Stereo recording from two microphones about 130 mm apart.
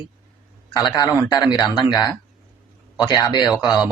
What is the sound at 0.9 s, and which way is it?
Speech, 30° left (ahead or behind).